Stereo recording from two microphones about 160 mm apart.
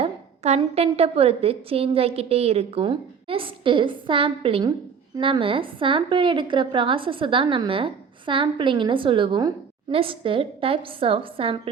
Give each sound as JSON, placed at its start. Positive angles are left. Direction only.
{"t": 0.0, "sound": "a woman's voice", "side_deg": -40}